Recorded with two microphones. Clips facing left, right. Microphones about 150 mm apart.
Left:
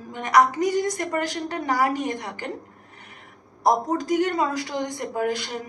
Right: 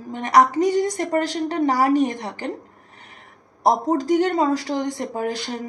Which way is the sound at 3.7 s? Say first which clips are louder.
Right 3 dB; 35° right (ahead or behind).